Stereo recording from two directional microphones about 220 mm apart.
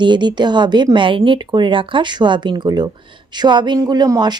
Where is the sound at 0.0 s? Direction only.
20° right (ahead or behind).